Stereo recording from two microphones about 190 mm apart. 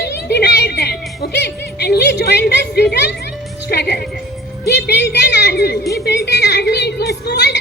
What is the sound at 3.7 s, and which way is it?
A woman's voice, 60° left (ahead or behind).